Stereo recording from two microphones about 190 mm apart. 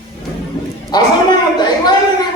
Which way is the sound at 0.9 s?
20° left (ahead or behind).